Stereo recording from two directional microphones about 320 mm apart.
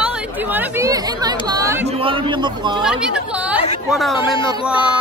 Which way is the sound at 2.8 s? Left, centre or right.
Centre.